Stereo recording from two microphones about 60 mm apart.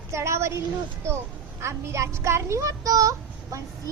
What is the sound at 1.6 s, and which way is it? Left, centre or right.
A woman's voice, right.